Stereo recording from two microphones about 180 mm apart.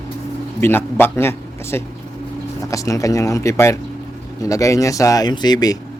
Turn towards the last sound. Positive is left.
turn(degrees=20)  # may be behind; listen again after turning